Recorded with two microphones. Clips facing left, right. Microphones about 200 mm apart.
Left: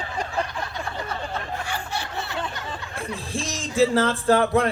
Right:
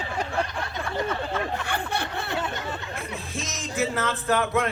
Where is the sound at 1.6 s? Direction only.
55° right (ahead or behind).